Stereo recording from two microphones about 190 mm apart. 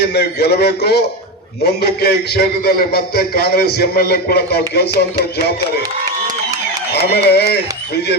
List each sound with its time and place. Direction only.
0.0 s a man's voice: 60° left (ahead or behind)
6.9 s a man's voice: 60° left (ahead or behind)